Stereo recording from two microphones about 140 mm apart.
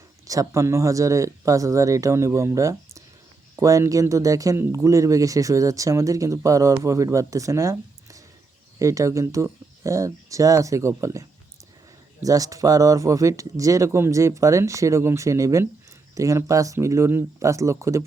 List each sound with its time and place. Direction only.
0.3 s speech: 25° right (ahead or behind)